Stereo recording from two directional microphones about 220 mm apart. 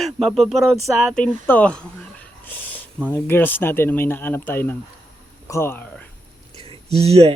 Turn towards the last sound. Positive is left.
turn(degrees=-30)  # may be behind; listen again after turning